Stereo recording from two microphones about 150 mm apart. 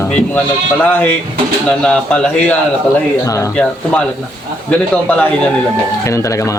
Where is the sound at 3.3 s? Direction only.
20° left (ahead or behind).